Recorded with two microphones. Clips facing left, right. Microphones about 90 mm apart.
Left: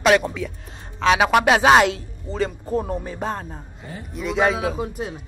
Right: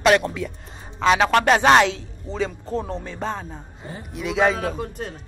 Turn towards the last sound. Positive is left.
turn(degrees=10)  # may be behind; listen again after turning